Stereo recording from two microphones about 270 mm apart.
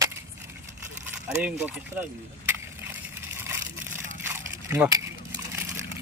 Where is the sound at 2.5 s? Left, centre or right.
Centre.